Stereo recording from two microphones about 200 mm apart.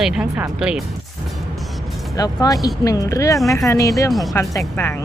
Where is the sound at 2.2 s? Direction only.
20° left (ahead or behind).